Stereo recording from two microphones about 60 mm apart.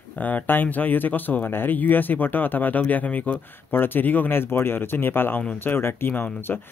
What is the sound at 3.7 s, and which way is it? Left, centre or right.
Speech, left.